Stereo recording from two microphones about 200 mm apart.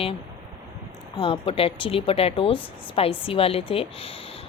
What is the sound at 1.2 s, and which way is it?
A woman's voice, 30° left (ahead or behind).